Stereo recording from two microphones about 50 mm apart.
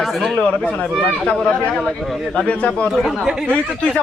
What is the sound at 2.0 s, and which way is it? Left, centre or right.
Speech, centre.